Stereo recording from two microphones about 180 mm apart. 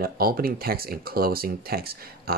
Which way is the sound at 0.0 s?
55° right (ahead or behind).